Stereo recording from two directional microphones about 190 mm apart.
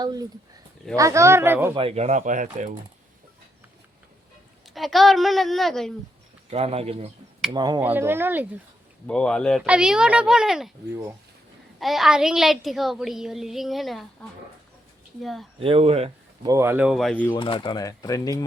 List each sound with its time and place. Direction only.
0.0 s speech: 20° right (ahead or behind)
1.7 s speech: 30° right (ahead or behind)
4.7 s speech: centre (ahead or behind)
6.5 s speech: 35° right (ahead or behind)
7.5 s speech: 20° right (ahead or behind)
7.8 s speech: 10° right (ahead or behind)
9.0 s speech: 5° left (ahead or behind)
11.8 s speech: centre (ahead or behind)
15.5 s speech: 30° right (ahead or behind)
16.5 s speech: 15° right (ahead or behind); by 17.3 s 5° left (ahead or behind)
17.3 s speech: 25° left (ahead or behind)